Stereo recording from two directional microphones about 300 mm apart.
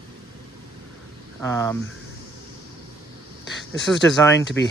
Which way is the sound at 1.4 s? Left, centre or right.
Centre.